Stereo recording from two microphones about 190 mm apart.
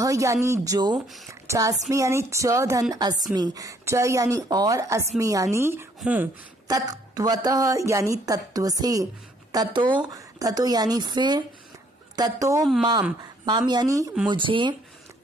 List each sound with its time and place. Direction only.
0.0 s a woman's voice: 15° right (ahead or behind)
0.9 s speech: centre (ahead or behind)
1.5 s a woman's voice: 15° right (ahead or behind)
6.7 s a woman's voice: 20° right (ahead or behind)